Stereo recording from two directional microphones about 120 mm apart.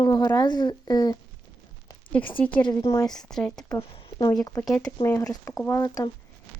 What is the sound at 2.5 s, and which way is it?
Speech, 40° left (ahead or behind).